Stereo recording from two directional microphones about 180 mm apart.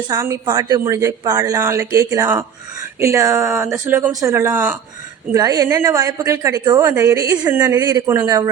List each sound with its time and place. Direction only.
0.1 s a woman's voice: 20° right (ahead or behind)
7.8 s a man's voice: 20° right (ahead or behind)